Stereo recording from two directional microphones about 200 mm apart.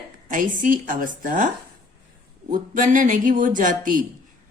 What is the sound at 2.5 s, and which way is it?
A woman's voice, 40° right (ahead or behind).